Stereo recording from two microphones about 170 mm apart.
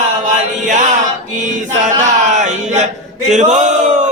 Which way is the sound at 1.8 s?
45° right (ahead or behind).